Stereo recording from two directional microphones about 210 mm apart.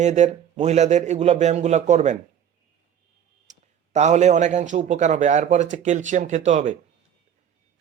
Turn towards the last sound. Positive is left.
turn(degrees=-35)  # may be behind; listen again after turning